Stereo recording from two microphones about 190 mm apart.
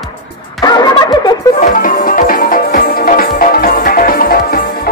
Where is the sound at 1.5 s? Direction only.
45° left (ahead or behind).